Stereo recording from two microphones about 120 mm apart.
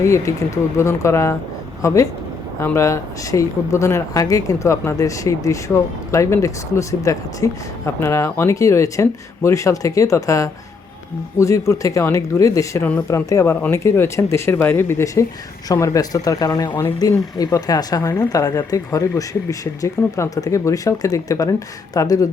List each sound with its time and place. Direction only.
0.0 s speech: 25° left (ahead or behind)